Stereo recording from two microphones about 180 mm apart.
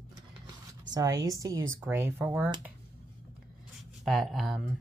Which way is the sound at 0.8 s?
20° right (ahead or behind).